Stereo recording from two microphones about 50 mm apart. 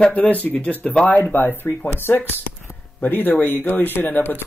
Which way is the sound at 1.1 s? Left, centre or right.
Left.